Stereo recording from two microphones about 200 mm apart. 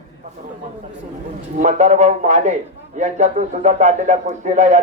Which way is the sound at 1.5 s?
35° right (ahead or behind).